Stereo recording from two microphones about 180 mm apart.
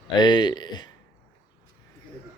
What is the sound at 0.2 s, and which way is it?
Speech, 25° left (ahead or behind).